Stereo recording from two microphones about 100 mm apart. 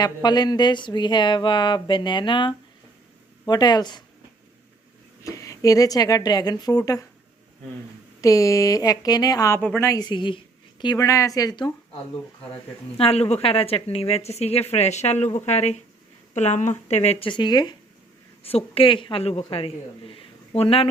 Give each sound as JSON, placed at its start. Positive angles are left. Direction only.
{"t": 0.0, "sound": "a sound", "side_deg": 45}
{"t": 3.4, "sound": "a sound", "side_deg": 45}
{"t": 5.2, "sound": "speech", "side_deg": 35}
{"t": 8.2, "sound": "speech", "side_deg": 35}
{"t": 9.6, "sound": "a woman's voice", "side_deg": 15}
{"t": 9.8, "sound": "speech", "side_deg": 35}
{"t": 10.1, "sound": "a woman's voice", "side_deg": 55}
{"t": 10.9, "sound": "speech", "side_deg": 35}
{"t": 13.0, "sound": "speech", "side_deg": 80}
{"t": 16.9, "sound": "speech", "side_deg": 90}
{"t": 17.2, "sound": "a sound", "side_deg": 50}
{"t": 18.4, "sound": "a woman's voice", "side_deg": 75}